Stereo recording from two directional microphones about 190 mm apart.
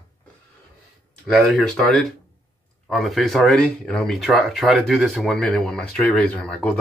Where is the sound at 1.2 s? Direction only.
Centre (ahead or behind).